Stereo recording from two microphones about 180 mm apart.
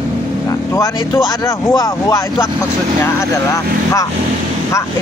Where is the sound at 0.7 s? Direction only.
15° left (ahead or behind).